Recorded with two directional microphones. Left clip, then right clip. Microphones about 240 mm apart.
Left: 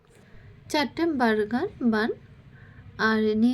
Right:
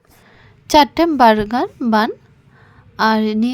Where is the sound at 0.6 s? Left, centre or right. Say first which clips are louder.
Right 14 dB; right.